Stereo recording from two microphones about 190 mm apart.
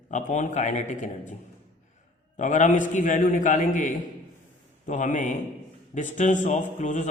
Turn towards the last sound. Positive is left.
turn(degrees=40)  # may be behind; listen again after turning